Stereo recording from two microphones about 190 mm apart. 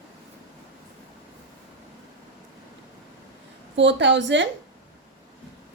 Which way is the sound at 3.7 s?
70° right (ahead or behind).